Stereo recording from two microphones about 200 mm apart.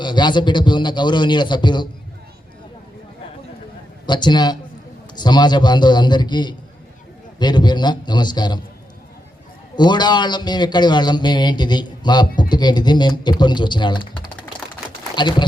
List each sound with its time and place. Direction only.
0.0 s a man's voice: 20° left (ahead or behind)
4.0 s a man's voice: 20° left (ahead or behind)
9.7 s a man's voice: 20° left (ahead or behind)
15.1 s speech: 20° left (ahead or behind)